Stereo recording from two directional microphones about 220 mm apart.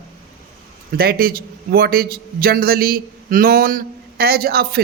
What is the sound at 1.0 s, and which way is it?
A man's voice, 45° right (ahead or behind).